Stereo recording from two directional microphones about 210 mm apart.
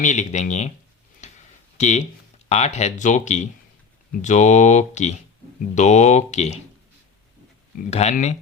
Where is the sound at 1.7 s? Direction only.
35° left (ahead or behind).